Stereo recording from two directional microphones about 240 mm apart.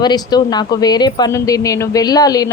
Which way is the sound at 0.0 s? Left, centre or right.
Centre.